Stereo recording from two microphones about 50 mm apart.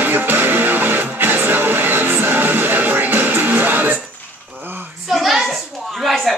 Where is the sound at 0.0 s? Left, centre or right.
Right.